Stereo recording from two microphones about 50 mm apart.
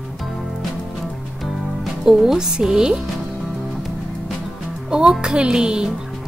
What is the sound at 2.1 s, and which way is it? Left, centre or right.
Speech, centre.